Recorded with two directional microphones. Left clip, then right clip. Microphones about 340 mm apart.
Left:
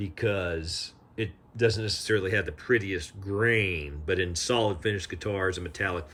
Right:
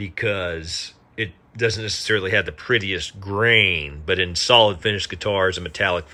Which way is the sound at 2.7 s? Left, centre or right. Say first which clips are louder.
Right 5 dB; left.